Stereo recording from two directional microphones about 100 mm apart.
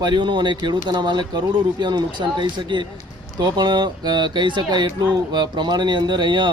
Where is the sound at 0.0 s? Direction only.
50° right (ahead or behind).